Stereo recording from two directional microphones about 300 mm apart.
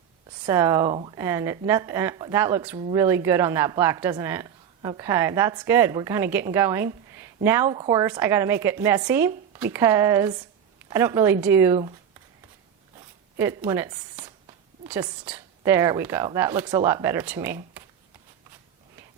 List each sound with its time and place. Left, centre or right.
0.4 s a woman's voice: centre
13.3 s a woman's voice: centre